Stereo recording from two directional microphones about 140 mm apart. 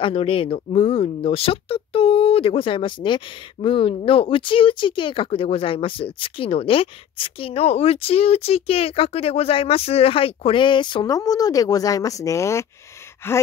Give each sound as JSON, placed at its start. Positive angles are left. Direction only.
{"t": 0.0, "sound": "speech", "side_deg": 40}
{"t": 13.2, "sound": "gasp", "side_deg": 15}